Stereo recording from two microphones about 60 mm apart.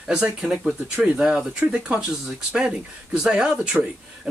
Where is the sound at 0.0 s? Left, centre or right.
Centre.